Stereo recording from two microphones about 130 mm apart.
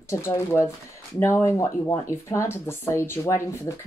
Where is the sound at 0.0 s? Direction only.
20° left (ahead or behind).